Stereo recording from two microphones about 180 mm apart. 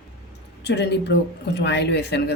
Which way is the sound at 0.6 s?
70° left (ahead or behind).